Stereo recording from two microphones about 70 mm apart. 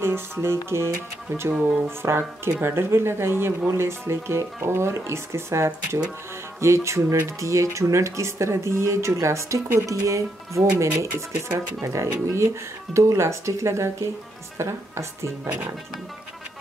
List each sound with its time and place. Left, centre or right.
0.0 s speech: right
1.5 s speech: centre
1.9 s a woman's voice: right